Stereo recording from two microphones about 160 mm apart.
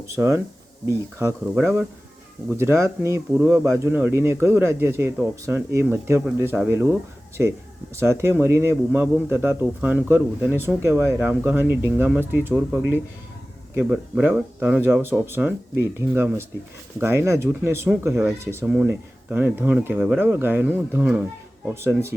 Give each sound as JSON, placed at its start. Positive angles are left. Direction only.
{"t": 0.0, "sound": "speech", "side_deg": -15}
{"t": 7.9, "sound": "speech", "side_deg": -15}